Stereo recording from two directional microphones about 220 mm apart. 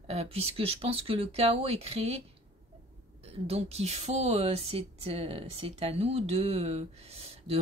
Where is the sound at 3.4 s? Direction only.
25° right (ahead or behind).